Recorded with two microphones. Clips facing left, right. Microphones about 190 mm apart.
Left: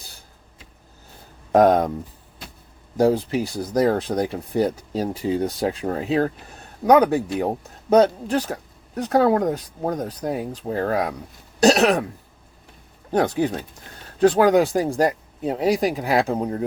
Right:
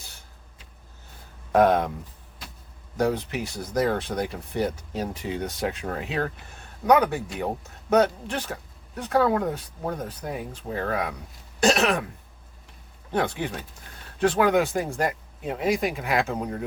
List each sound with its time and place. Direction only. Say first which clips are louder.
1.5 s speech: left 4 dB; 40° left (ahead or behind)
3.0 s speech: left 6 dB; 30° left (ahead or behind)
13.1 s speech: left 6 dB; 40° left (ahead or behind)